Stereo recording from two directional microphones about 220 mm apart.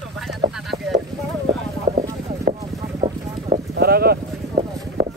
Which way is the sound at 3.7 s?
45° right (ahead or behind).